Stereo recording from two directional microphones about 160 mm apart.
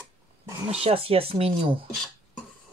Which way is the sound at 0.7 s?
40° right (ahead or behind).